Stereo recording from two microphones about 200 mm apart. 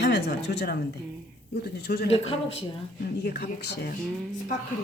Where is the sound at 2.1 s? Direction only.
30° left (ahead or behind).